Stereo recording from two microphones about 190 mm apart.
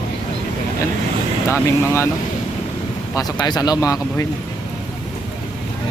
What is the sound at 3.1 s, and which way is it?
Speech, 20° left (ahead or behind).